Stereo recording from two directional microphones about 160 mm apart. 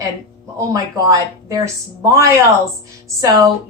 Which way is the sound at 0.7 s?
20° right (ahead or behind).